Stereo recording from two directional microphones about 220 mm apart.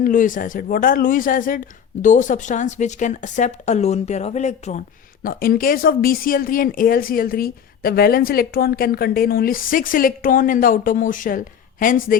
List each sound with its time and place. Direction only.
0.0 s speech: 35° left (ahead or behind)
5.2 s speech: 40° left (ahead or behind)